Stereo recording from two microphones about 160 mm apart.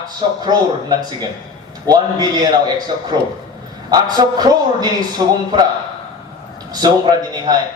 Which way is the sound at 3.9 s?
25° right (ahead or behind).